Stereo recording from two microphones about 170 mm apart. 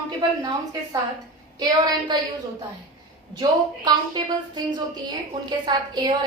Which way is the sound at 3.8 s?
25° right (ahead or behind).